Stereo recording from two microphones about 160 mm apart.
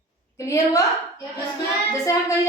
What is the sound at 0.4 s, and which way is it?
Speech, 20° left (ahead or behind).